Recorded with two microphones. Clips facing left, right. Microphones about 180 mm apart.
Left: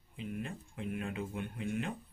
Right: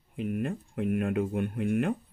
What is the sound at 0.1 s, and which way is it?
Speech, 55° right (ahead or behind).